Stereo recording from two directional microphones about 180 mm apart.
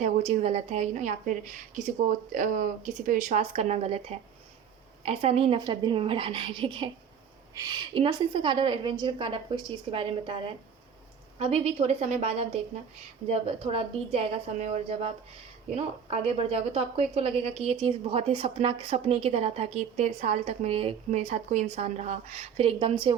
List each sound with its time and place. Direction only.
0.0 s a woman's voice: 40° right (ahead or behind)